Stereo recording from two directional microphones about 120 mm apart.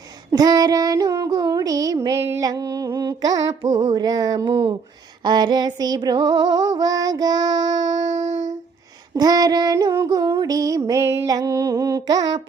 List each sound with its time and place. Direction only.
0.3 s child singing: 30° right (ahead or behind)
8.2 s music: 90° right
9.1 s female singing: 35° right (ahead or behind)
9.9 s a sound: 30° right (ahead or behind)